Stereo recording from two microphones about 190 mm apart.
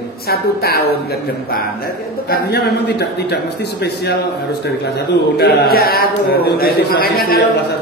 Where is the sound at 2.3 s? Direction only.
60° left (ahead or behind).